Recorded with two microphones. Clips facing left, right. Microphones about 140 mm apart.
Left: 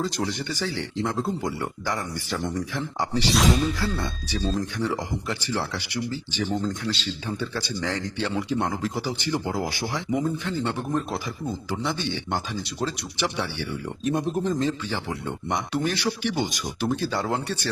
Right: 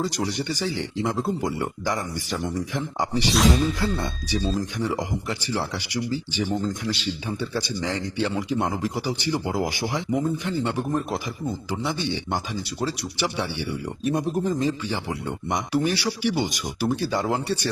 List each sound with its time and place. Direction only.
0.0 s speech: 15° right (ahead or behind)
3.3 s speech: centre (ahead or behind)
3.8 s speech: 20° right (ahead or behind)
10.1 s speech: centre (ahead or behind)
10.3 s speech: 10° right (ahead or behind)